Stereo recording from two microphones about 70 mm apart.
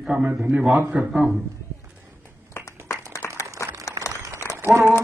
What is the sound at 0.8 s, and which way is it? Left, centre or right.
Speech, right.